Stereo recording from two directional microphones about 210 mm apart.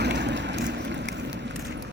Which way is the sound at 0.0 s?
55° right (ahead or behind).